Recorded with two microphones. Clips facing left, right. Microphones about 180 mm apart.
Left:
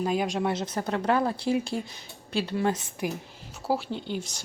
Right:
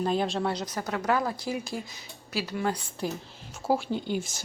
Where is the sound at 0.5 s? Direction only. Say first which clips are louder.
Left 3 dB; 25° left (ahead or behind).